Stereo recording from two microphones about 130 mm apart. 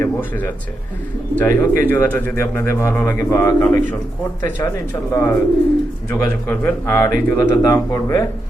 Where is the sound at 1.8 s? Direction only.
15° left (ahead or behind).